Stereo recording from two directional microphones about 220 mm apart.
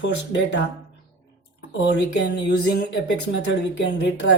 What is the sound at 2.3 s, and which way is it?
Speech, 55° left (ahead or behind).